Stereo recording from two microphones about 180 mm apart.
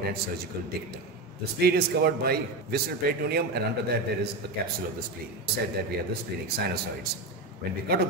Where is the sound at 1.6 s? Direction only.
60° right (ahead or behind).